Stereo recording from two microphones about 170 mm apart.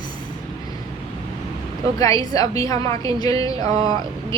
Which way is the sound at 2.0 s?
20° left (ahead or behind).